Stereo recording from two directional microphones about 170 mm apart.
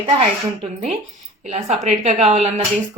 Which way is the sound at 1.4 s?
40° right (ahead or behind).